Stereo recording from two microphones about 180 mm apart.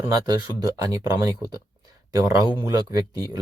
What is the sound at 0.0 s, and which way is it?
Speech, 20° right (ahead or behind).